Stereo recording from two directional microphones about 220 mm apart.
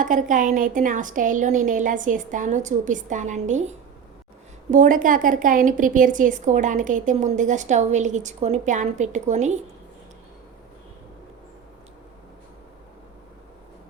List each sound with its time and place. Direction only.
0.0 s a woman's voice: 35° right (ahead or behind)